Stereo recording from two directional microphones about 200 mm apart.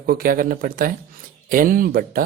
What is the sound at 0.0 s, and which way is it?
Speech, 50° right (ahead or behind).